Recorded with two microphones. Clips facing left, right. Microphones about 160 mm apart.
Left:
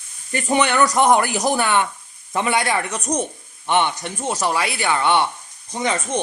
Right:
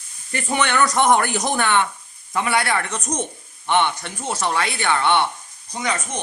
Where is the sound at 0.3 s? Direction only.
15° left (ahead or behind).